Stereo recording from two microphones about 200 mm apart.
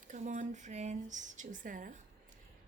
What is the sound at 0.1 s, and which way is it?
Speech, 40° right (ahead or behind).